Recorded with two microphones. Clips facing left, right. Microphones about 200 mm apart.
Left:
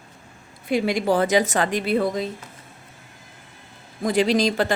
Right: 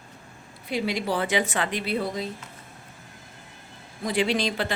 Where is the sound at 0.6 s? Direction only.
50° left (ahead or behind).